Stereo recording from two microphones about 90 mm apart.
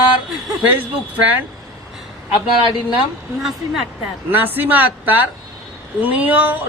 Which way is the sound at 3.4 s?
5° right (ahead or behind).